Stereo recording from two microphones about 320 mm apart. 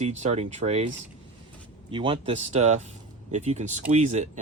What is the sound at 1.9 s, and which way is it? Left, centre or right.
Speech, centre.